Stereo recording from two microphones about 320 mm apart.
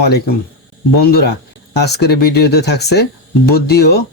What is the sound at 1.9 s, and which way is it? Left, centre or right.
Speech, left.